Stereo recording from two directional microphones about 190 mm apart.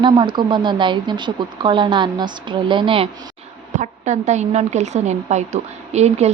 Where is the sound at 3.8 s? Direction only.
40° right (ahead or behind).